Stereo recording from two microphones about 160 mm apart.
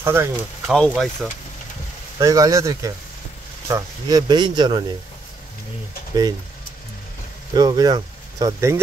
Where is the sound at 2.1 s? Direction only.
20° right (ahead or behind).